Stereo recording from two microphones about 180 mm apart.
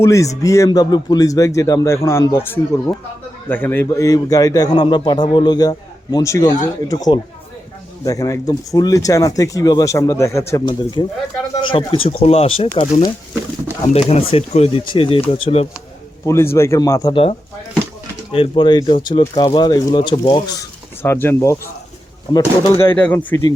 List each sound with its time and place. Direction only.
0.0 s a man's voice: 15° left (ahead or behind); by 15.6 s 30° left (ahead or behind)
16.2 s a man's voice: 15° left (ahead or behind)
18.3 s a man's voice: 30° left (ahead or behind); by 23.4 s 10° left (ahead or behind)